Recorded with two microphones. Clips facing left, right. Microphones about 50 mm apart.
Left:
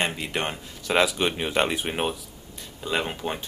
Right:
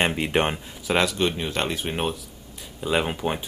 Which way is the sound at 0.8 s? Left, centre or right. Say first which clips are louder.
Even; centre.